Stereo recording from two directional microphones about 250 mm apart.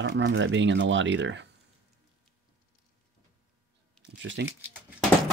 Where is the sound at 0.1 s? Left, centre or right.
Right.